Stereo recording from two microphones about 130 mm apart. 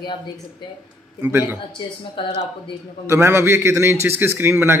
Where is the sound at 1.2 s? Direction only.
15° right (ahead or behind).